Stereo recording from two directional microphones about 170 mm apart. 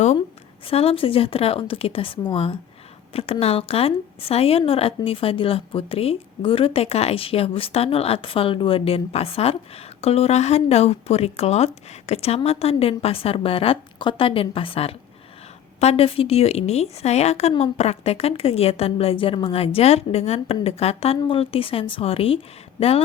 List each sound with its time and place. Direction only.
0.7 s a woman's voice: 35° left (ahead or behind)